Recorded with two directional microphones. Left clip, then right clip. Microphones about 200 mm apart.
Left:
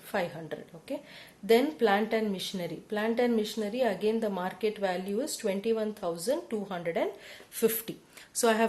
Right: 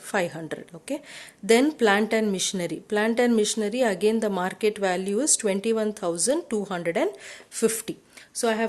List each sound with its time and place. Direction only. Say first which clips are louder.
0.1 s speech: right 6 dB; 40° right (ahead or behind)
8.4 s a woman's voice: right 1 dB; 10° right (ahead or behind)